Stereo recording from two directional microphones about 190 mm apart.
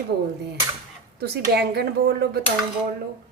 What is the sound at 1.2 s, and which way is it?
Speech, 60° right (ahead or behind).